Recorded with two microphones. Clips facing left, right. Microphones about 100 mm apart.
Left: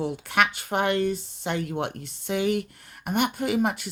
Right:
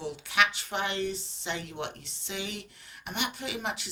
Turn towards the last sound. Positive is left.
turn(degrees=50)  # may be behind; listen again after turning